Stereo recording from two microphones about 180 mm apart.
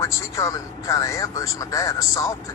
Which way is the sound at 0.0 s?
15° left (ahead or behind).